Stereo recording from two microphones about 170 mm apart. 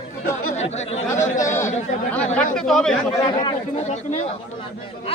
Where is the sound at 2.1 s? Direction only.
10° left (ahead or behind).